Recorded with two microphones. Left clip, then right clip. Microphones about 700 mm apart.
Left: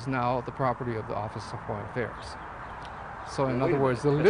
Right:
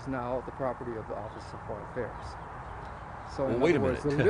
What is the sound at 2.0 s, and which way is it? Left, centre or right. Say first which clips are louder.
Speech: left 3 dB; left.